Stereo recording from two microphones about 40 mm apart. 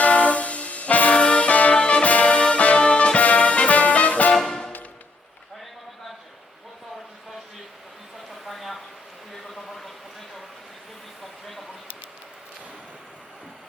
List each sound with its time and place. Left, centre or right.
0.0 s music: left
4.4 s music: centre
8.4 s a sound: centre